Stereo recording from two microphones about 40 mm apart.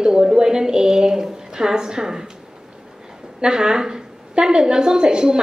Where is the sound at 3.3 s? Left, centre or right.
Centre.